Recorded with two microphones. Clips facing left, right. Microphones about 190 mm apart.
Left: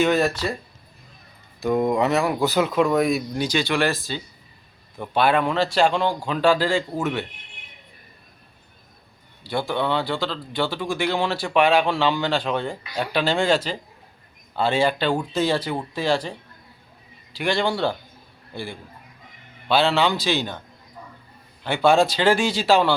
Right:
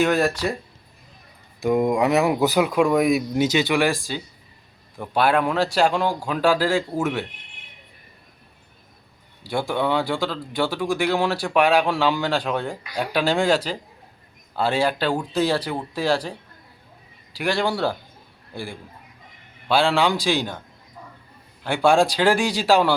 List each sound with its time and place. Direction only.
0.0 s speech: 10° right (ahead or behind)
1.6 s a man's voice: 15° right (ahead or behind)
9.5 s speech: 10° right (ahead or behind)
17.3 s speech: 5° right (ahead or behind)
21.6 s speech: 10° right (ahead or behind)